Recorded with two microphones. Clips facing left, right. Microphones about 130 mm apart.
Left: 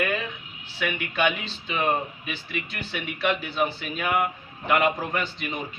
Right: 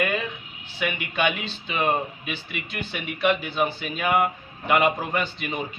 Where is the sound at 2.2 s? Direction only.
30° left (ahead or behind).